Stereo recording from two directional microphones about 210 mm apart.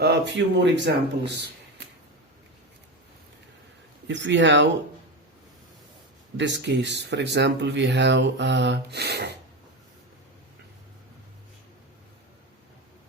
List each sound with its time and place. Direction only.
0.0 s speech: 55° right (ahead or behind)
4.1 s speech: 60° right (ahead or behind)
6.3 s speech: 55° right (ahead or behind)